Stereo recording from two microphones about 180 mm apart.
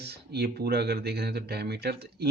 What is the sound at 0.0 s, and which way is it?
Speech, 65° right (ahead or behind).